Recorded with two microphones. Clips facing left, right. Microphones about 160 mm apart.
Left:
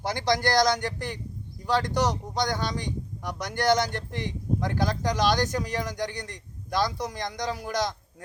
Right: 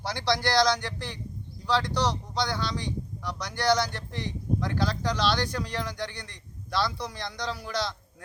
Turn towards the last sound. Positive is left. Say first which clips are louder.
# left 3 dB
turn(degrees=45)  # may be behind; listen again after turning